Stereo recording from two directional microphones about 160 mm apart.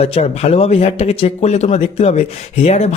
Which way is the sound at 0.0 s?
40° left (ahead or behind).